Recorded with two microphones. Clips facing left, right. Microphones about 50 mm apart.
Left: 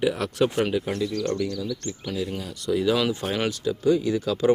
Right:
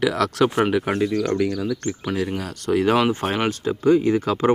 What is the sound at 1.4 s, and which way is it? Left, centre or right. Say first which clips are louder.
Speech: right 5 dB; right.